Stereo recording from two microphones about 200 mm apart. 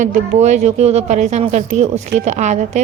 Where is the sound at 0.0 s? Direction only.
35° right (ahead or behind).